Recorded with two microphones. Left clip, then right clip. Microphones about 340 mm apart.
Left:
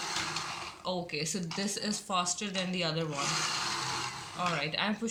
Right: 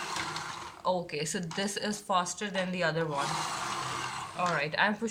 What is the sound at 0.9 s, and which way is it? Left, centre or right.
Speech, right.